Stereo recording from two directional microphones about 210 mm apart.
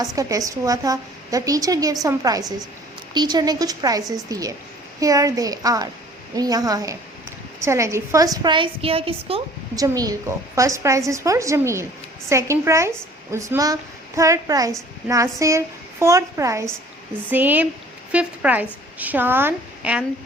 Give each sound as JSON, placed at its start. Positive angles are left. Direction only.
{"t": 0.0, "sound": "a woman's voice", "side_deg": -15}
{"t": 9.8, "sound": "a woman's voice", "side_deg": -15}